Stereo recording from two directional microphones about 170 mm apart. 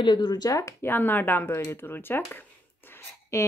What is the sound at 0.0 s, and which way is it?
Speech, 25° left (ahead or behind).